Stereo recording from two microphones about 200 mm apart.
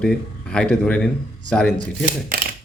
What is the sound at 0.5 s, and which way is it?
A man's voice, 5° left (ahead or behind).